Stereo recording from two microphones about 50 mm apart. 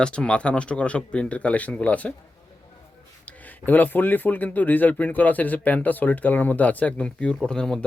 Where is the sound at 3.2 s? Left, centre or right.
Left.